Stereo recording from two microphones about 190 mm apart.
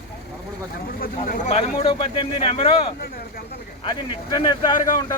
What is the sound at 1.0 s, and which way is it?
A man's voice, 45° left (ahead or behind).